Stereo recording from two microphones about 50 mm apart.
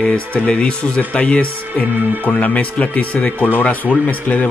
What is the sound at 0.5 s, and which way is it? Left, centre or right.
A man's voice, left.